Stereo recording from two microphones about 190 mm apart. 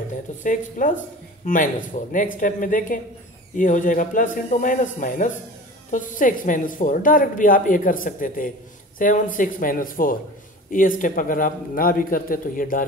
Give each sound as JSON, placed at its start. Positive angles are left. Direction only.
{"t": 0.4, "sound": "a woman's voice", "side_deg": 45}